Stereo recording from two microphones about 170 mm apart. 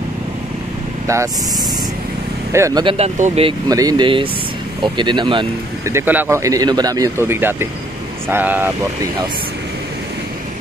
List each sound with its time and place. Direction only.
1.0 s speech: 15° right (ahead or behind)
2.5 s speech: 15° right (ahead or behind)
2.8 s speech: 30° right (ahead or behind)
3.6 s speech: 20° right (ahead or behind)
5.9 s speech: 10° right (ahead or behind)